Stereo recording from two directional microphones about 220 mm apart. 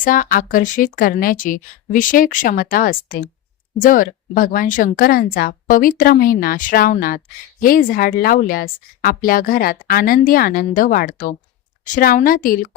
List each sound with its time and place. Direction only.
0.0 s speech: 40° left (ahead or behind)